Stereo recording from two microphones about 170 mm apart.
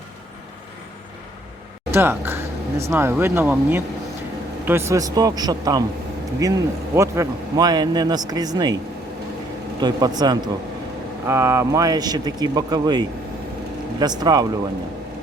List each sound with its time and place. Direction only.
1.9 s a sound: 15° right (ahead or behind)
2.9 s a man's voice: 15° right (ahead or behind)
9.8 s a man's voice: 25° right (ahead or behind)